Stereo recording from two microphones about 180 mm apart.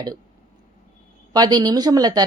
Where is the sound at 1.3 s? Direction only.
20° right (ahead or behind).